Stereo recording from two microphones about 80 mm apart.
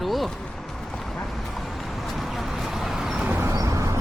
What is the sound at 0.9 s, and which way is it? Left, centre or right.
Dog, centre.